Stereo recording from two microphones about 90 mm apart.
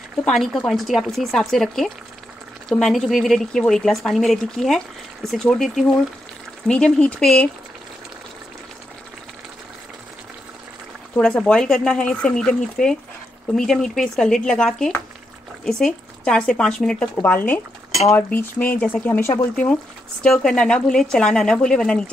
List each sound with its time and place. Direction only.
0.2 s speech: 5° left (ahead or behind)
11.1 s speech: 10° left (ahead or behind)
17.1 s speech: 20° left (ahead or behind)